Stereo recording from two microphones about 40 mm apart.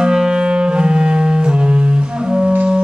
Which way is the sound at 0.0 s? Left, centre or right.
Right.